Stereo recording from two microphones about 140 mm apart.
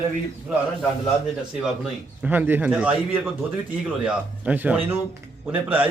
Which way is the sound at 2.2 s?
10° right (ahead or behind).